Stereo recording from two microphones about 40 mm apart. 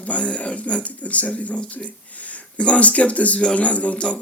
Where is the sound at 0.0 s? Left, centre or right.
Left.